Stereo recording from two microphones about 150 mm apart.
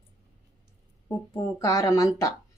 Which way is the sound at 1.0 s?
20° left (ahead or behind).